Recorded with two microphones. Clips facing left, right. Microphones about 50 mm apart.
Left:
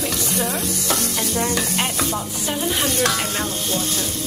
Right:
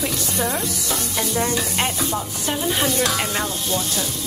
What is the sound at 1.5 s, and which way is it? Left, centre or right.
Chopping, left.